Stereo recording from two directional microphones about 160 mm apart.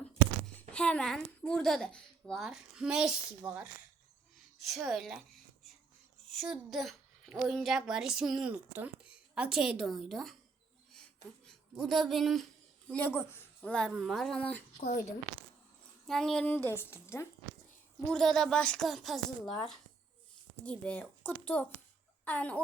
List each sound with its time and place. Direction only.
0.7 s a child's voice: 5° left (ahead or behind)
6.2 s a child's voice: centre (ahead or behind)
10.9 s a sound: 5° left (ahead or behind)
12.9 s a child's voice: 10° left (ahead or behind)
14.8 s a woman's voice: 55° left (ahead or behind)
16.0 s a woman's voice: centre (ahead or behind)
18.1 s a child's voice: centre (ahead or behind)
20.7 s a woman's voice: 5° left (ahead or behind)
22.2 s fowl: 10° left (ahead or behind)